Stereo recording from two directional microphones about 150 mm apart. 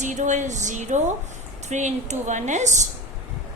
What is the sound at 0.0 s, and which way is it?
A woman's voice, 55° right (ahead or behind).